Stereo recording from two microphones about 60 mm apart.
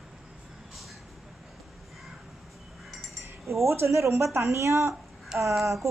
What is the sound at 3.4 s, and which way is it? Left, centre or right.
Speech, right.